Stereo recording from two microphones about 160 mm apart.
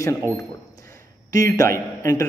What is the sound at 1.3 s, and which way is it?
Speech, 20° left (ahead or behind).